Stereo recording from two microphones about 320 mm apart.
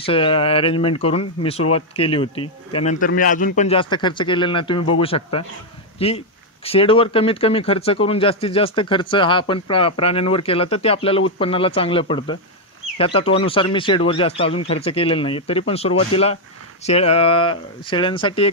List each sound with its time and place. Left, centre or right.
0.0 s speech: centre